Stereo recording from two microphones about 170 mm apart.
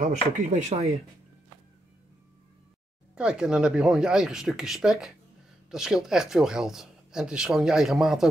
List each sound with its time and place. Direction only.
0.0 s speech: 45° right (ahead or behind)
3.2 s speech: 5° right (ahead or behind)